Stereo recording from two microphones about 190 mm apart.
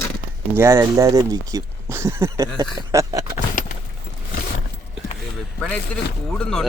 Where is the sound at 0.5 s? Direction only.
15° right (ahead or behind).